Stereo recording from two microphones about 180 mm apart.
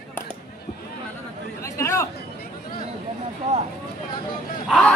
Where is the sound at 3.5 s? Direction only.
40° right (ahead or behind).